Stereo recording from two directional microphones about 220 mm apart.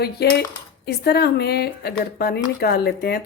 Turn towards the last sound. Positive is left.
turn(degrees=45)  # may be behind; listen again after turning